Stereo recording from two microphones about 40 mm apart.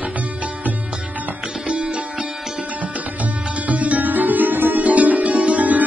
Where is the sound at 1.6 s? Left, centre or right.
Right.